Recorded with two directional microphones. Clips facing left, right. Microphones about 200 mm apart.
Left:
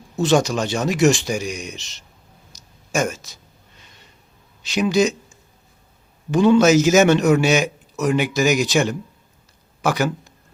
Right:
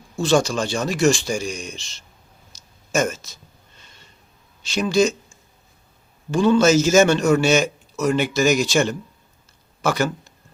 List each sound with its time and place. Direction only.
0.2 s speech: 20° left (ahead or behind)
2.9 s speech: 15° left (ahead or behind)
4.7 s speech: 15° left (ahead or behind)